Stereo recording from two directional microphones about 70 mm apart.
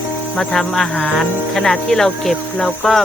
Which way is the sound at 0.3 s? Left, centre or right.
Centre.